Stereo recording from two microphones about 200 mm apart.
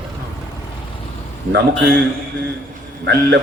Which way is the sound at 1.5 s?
55° right (ahead or behind).